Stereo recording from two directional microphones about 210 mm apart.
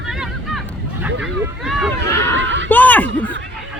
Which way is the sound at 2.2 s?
60° right (ahead or behind).